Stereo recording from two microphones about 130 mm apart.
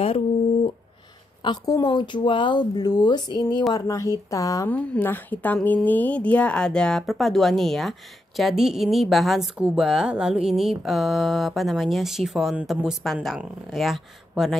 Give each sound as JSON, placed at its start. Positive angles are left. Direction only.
{"t": 1.4, "sound": "speech", "side_deg": 30}
{"t": 4.6, "sound": "a woman's voice", "side_deg": 15}